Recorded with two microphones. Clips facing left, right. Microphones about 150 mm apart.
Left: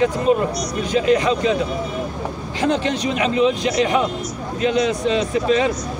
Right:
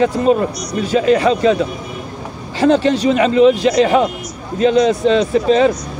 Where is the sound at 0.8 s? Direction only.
35° right (ahead or behind).